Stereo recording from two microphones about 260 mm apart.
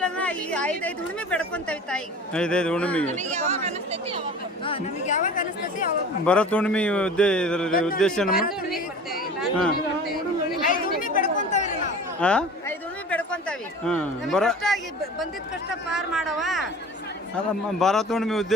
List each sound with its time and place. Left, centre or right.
0.0 s speech: centre
3.1 s speech: right
4.6 s speech: left
6.2 s speech: centre
7.7 s a man's voice: left
7.9 s speech: centre
10.6 s chatter: left
12.2 s a sound: centre
13.8 s speech: centre
15.9 s speech: centre
17.7 s speech: centre